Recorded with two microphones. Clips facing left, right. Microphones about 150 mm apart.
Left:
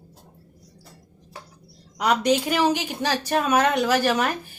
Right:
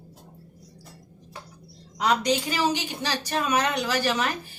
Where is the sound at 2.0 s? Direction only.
55° left (ahead or behind).